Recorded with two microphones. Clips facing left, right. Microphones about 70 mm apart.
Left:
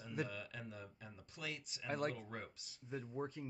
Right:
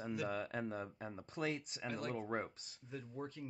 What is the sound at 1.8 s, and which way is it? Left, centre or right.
Speech, left.